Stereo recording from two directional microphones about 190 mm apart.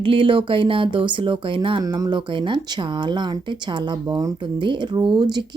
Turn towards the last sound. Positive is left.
turn(degrees=-25)  # may be behind; listen again after turning